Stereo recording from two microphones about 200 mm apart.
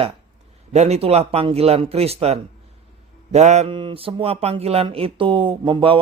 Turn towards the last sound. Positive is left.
turn(degrees=-25)  # may be behind; listen again after turning